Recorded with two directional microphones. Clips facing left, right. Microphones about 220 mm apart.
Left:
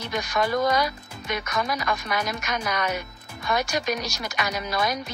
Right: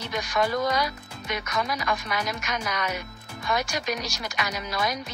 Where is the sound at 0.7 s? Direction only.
50° left (ahead or behind).